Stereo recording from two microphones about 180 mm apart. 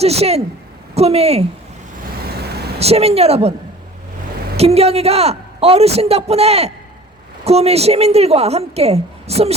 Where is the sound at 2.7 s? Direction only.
35° right (ahead or behind).